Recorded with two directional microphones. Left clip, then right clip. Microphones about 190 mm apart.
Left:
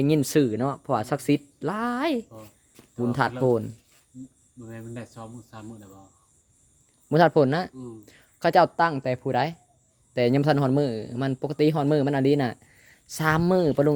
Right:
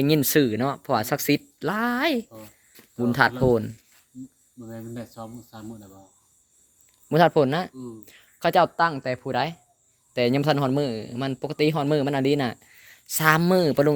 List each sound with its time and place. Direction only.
0.0 s speech: 10° left (ahead or behind)
7.1 s a man's voice: 20° left (ahead or behind)
7.7 s speech: centre (ahead or behind)
8.0 s a man's voice: 25° left (ahead or behind)